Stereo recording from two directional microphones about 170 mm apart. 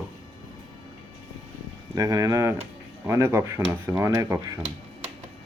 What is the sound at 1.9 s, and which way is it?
Speech, 20° right (ahead or behind).